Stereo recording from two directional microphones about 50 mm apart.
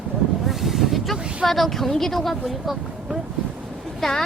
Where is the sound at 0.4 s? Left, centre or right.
Centre.